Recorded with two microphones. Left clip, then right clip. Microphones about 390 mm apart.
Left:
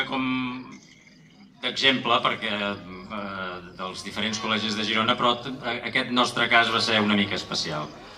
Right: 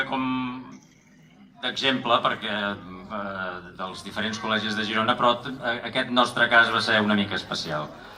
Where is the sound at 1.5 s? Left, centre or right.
Centre.